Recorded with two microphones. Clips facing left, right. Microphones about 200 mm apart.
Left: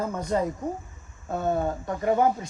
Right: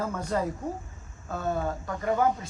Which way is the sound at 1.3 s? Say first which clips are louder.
Left 4 dB; 25° left (ahead or behind).